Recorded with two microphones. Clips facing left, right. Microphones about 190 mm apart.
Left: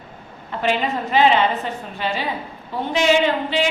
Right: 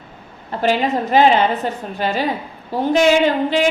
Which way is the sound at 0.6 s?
40° right (ahead or behind).